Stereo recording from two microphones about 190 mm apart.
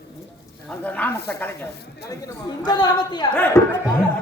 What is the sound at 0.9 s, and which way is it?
Speech, 10° left (ahead or behind).